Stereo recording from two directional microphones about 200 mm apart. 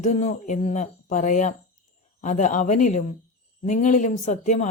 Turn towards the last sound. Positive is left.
turn(degrees=40)  # may be behind; listen again after turning